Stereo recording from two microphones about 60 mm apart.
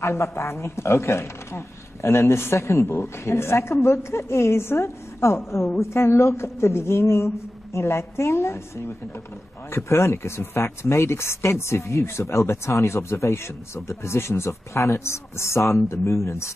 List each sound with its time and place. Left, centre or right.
0.0 s speech: left